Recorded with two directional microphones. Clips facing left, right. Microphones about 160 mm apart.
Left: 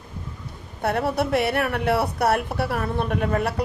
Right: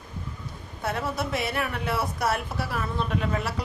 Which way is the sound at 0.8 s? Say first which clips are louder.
Left 6 dB; 65° left (ahead or behind).